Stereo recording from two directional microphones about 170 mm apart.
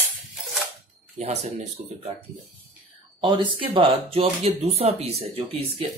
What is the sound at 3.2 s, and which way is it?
Speech, 25° right (ahead or behind).